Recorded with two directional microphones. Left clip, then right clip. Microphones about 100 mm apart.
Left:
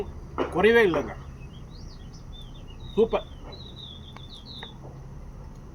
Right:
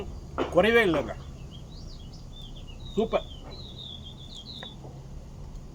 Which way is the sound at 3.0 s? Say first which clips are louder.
Left 6 dB; 35° right (ahead or behind).